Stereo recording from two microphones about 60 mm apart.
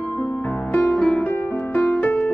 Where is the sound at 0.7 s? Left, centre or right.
Left.